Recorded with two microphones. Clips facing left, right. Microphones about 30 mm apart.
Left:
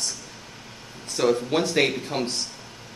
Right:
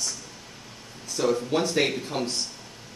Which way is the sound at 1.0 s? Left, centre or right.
Left.